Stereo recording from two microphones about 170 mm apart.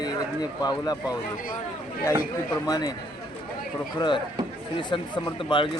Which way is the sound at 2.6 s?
20° left (ahead or behind).